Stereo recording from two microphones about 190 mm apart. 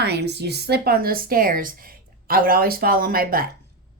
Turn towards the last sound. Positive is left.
turn(degrees=-50)  # may be behind; listen again after turning